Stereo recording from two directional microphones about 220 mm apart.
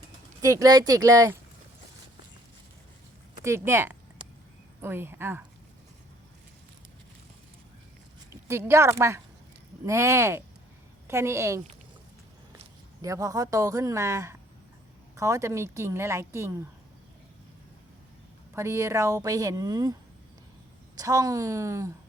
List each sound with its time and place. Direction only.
0.4 s a woman's voice: 15° right (ahead or behind)
3.3 s a woman's voice: 10° right (ahead or behind)
8.3 s a woman's voice: 10° right (ahead or behind)
13.0 s a woman's voice: 15° right (ahead or behind)
18.5 s a woman's voice: 10° right (ahead or behind)